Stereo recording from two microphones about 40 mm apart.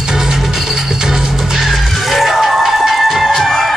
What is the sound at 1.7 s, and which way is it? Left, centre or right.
Music, centre.